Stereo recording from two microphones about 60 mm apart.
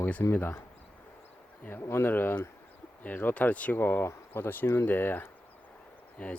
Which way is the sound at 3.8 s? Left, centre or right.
Left.